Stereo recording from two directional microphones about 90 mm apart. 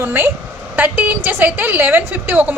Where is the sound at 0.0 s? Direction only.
25° right (ahead or behind).